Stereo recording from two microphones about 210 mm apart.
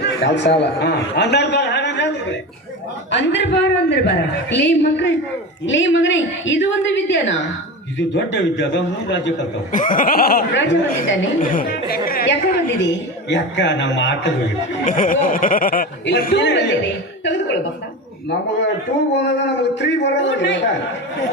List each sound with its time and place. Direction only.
0.0 s a sound: 55° left (ahead or behind)
0.6 s a man's voice: 55° left (ahead or behind)
9.7 s speech: 40° left (ahead or behind); by 11.3 s 60° left (ahead or behind)
11.5 s speech: 45° left (ahead or behind)
12.8 s a woman's voice: 60° left (ahead or behind)
14.8 s speech: 40° left (ahead or behind); by 17.6 s 60° left (ahead or behind)
19.1 s a woman's voice: 55° left (ahead or behind)